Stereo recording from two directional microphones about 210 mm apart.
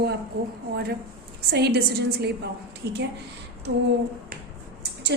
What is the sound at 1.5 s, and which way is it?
Speech, 50° right (ahead or behind).